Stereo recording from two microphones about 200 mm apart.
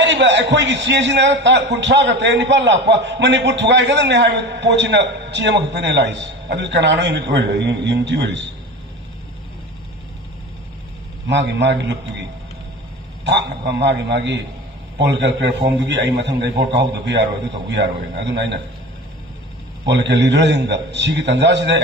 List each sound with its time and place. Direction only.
0.0 s a man's voice: 60° right (ahead or behind)
11.3 s a man's voice: 60° right (ahead or behind)
13.2 s a man's voice: 60° right (ahead or behind)
19.8 s a man's voice: 60° right (ahead or behind)